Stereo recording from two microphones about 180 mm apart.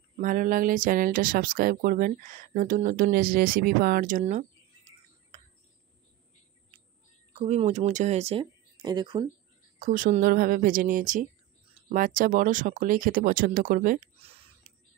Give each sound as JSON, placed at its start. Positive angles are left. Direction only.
{"t": 0.2, "sound": "speech", "side_deg": -50}
{"t": 7.3, "sound": "speech", "side_deg": -35}
{"t": 9.8, "sound": "speech", "side_deg": -45}
{"t": 14.2, "sound": "a sound", "side_deg": -35}